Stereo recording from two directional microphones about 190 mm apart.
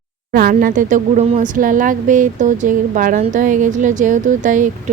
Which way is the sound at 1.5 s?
45° right (ahead or behind).